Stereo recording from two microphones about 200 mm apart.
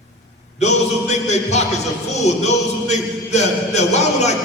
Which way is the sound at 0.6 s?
35° left (ahead or behind).